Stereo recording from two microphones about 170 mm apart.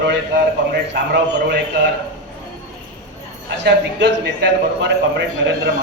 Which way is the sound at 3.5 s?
90° right.